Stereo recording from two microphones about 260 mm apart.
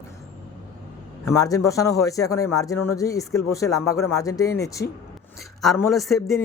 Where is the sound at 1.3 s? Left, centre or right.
Centre.